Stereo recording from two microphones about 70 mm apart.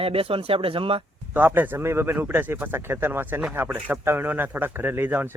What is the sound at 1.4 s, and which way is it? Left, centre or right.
Speech, right.